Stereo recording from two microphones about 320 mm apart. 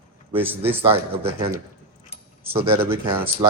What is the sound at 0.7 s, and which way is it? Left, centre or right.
Speech, centre.